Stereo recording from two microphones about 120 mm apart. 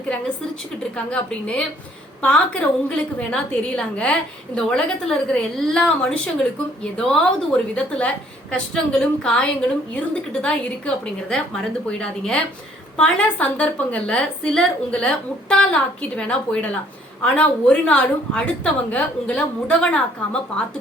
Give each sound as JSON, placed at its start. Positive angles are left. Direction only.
{"t": 0.9, "sound": "a woman's voice", "side_deg": 10}